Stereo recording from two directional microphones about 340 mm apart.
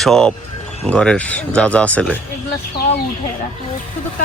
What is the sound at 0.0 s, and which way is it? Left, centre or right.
Speech, centre.